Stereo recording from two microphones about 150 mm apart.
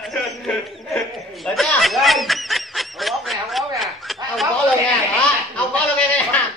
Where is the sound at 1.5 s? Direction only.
Centre (ahead or behind).